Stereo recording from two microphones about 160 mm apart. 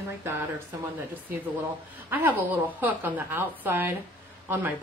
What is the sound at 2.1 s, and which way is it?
Speech, 10° right (ahead or behind).